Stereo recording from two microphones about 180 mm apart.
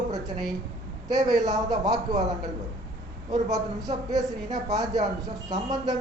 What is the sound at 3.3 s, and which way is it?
A man's voice, 20° right (ahead or behind).